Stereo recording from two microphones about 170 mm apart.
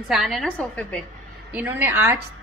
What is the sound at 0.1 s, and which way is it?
Speech, centre (ahead or behind).